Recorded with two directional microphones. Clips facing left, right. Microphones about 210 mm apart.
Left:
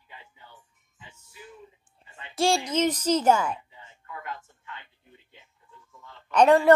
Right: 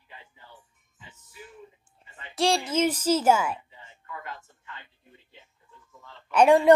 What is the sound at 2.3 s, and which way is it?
A woman's voice, centre (ahead or behind).